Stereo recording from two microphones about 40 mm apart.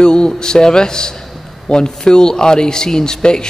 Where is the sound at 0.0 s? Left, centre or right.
Centre.